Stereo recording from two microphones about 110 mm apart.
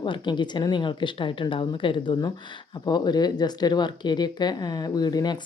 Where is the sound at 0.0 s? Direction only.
45° left (ahead or behind).